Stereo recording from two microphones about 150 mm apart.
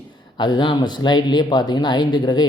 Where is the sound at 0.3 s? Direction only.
30° left (ahead or behind).